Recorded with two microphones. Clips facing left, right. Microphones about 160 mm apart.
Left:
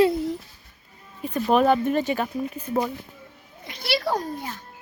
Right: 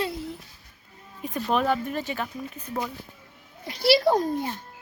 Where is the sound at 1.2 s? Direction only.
15° right (ahead or behind).